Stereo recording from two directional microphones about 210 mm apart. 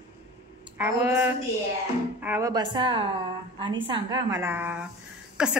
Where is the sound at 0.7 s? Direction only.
10° right (ahead or behind).